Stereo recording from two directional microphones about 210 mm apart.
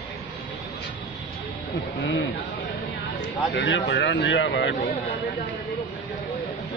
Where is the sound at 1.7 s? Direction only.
55° left (ahead or behind).